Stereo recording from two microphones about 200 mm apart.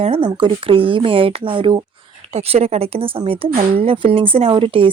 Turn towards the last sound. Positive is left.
turn(degrees=-25)  # may be behind; listen again after turning